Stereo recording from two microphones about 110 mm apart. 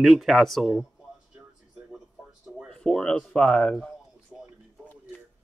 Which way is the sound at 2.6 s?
5° left (ahead or behind).